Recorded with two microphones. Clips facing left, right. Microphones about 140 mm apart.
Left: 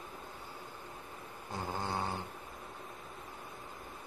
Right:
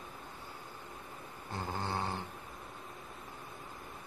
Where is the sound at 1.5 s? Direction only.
15° left (ahead or behind).